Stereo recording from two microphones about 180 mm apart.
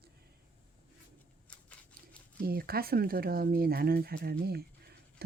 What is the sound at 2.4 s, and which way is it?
Speech, 55° right (ahead or behind).